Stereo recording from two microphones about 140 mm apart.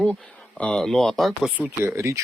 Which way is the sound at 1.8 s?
20° right (ahead or behind).